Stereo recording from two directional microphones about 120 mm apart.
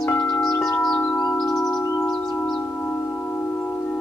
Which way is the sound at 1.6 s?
25° left (ahead or behind).